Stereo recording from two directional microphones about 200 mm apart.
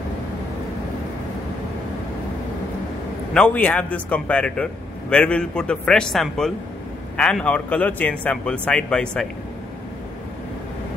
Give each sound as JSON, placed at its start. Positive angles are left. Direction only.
{"t": 3.3, "sound": "a man's voice", "side_deg": 5}